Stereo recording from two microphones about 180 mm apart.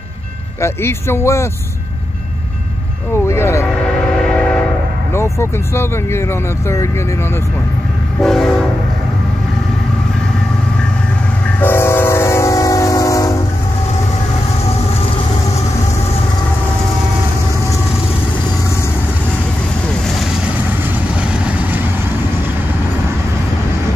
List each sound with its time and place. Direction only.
0.6 s speech: 15° left (ahead or behind)
3.3 s speech: 15° left (ahead or behind)
4.3 s train: 5° left (ahead or behind)
5.1 s speech: 15° left (ahead or behind)
8.2 s train: centre (ahead or behind)
11.6 s train: 15° left (ahead or behind)
21.2 s vehicle: 5° right (ahead or behind)